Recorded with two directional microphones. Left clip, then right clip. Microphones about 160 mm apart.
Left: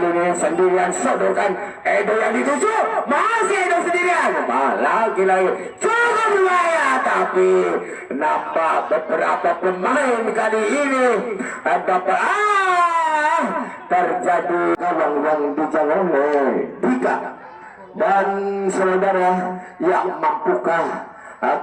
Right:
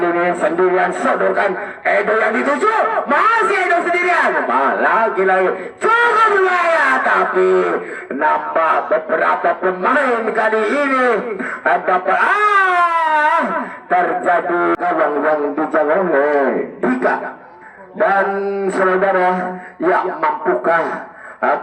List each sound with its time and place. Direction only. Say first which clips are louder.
0.0 s a man's voice: right 2 dB; 15° right (ahead or behind)
15.4 s music: right 2 dB; 30° right (ahead or behind)
15.7 s a man's voice: right 4 dB; 15° right (ahead or behind)